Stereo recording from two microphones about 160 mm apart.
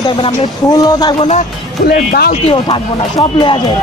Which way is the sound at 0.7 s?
25° left (ahead or behind).